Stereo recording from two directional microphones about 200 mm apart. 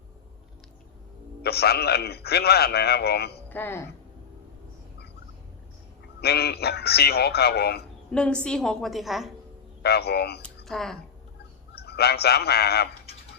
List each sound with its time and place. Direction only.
1.4 s a man's voice: 55° left (ahead or behind)
3.5 s speech: 10° left (ahead or behind)
6.1 s a man's voice: 55° left (ahead or behind)
8.1 s a woman's voice: 5° left (ahead or behind)
9.8 s a man's voice: 55° left (ahead or behind)
10.4 s speech: centre (ahead or behind)
11.7 s speech: 55° left (ahead or behind)